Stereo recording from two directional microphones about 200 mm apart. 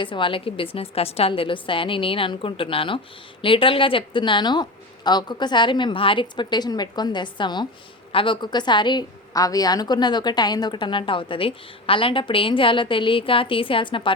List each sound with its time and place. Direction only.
0.0 s a woman's voice: 25° left (ahead or behind)